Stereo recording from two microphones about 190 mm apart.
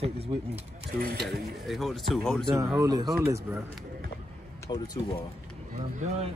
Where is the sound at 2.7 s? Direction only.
20° right (ahead or behind).